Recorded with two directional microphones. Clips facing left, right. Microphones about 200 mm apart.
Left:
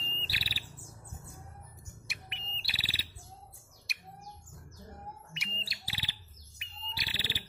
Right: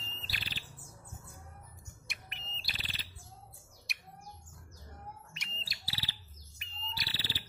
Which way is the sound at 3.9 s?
Centre (ahead or behind).